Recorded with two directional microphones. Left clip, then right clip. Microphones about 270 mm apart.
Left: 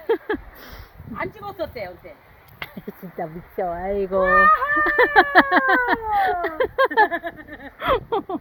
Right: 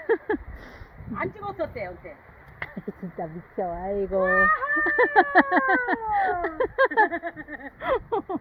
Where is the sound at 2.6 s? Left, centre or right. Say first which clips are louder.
Left 1 dB; centre.